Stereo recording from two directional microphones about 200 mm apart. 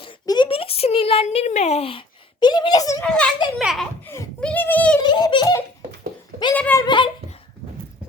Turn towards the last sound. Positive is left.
turn(degrees=25)  # may be behind; listen again after turning